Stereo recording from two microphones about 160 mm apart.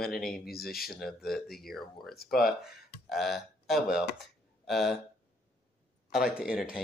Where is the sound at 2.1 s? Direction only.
70° left (ahead or behind).